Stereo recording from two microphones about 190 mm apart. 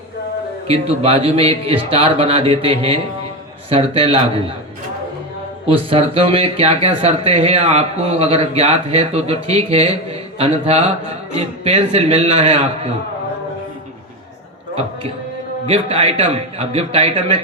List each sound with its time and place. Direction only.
0.7 s a man's voice: 30° right (ahead or behind)
5.6 s speech: 30° right (ahead or behind)
15.6 s speech: 35° right (ahead or behind)